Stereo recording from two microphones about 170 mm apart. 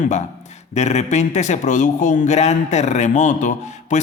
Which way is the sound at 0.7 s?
40° left (ahead or behind).